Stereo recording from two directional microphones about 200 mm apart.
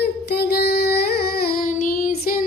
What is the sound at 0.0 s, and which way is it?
Music, 55° left (ahead or behind).